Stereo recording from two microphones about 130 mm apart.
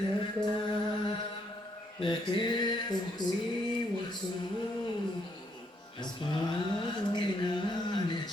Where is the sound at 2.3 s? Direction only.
35° left (ahead or behind).